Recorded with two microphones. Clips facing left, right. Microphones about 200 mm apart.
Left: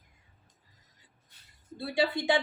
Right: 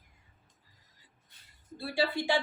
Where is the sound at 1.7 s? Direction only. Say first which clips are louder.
Left 2 dB; 20° left (ahead or behind).